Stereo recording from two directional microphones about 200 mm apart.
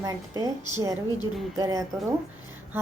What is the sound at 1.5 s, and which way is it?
Speech, 20° right (ahead or behind).